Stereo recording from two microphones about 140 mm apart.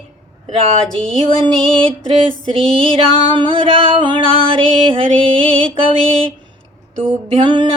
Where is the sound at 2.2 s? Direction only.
40° right (ahead or behind).